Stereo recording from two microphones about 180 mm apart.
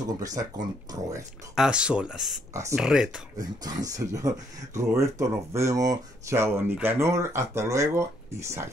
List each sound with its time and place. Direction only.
0.0 s speech: 20° right (ahead or behind)
1.5 s speech: 5° right (ahead or behind)
3.6 s speech: 20° right (ahead or behind)